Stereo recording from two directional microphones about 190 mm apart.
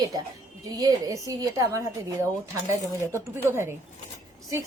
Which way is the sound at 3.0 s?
10° right (ahead or behind).